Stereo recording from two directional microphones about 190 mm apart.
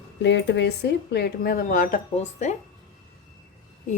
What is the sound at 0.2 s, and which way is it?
Speech, 65° left (ahead or behind).